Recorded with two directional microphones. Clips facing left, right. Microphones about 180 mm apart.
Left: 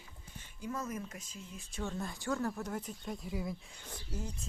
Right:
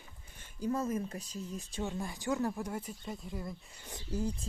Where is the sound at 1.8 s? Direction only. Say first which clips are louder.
Right 1 dB; 15° right (ahead or behind).